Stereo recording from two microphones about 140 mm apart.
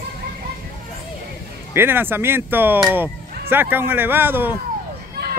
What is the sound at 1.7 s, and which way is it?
Speech, 15° right (ahead or behind).